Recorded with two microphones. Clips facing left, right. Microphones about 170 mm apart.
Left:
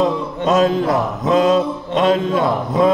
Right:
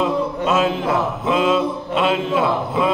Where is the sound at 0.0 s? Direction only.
40° left (ahead or behind).